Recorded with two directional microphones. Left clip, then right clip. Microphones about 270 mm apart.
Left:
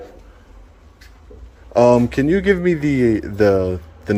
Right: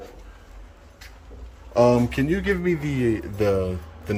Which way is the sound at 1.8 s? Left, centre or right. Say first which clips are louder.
Left 5 dB; centre.